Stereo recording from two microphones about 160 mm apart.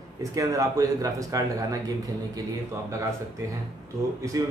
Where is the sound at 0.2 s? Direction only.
20° right (ahead or behind).